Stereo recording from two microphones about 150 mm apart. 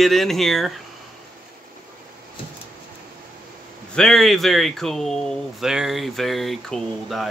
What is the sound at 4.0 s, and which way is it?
Speech, centre (ahead or behind).